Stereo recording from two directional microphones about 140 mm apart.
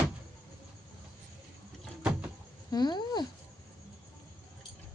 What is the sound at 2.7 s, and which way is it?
Speech, 30° left (ahead or behind).